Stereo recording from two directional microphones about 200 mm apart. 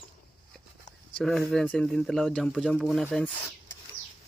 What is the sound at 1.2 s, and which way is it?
Speech, 5° left (ahead or behind).